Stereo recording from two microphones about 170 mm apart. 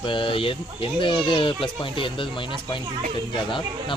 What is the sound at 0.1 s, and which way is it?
Speech, 30° left (ahead or behind).